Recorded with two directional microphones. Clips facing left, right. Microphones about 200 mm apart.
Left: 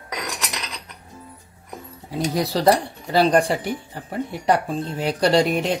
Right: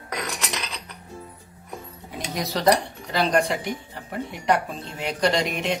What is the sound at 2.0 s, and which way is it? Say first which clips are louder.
Speech: left 7 dB; 30° left (ahead or behind).